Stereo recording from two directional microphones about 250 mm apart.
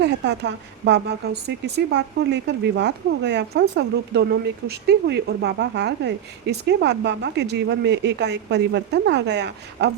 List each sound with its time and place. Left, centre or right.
0.0 s speech: right